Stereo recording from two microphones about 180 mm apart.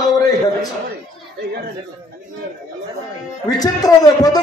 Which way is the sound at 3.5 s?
20° left (ahead or behind).